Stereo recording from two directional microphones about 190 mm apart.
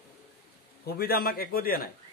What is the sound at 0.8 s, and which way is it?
A man's voice, 55° left (ahead or behind).